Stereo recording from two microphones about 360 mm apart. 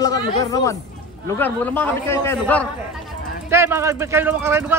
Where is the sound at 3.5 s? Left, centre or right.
Centre.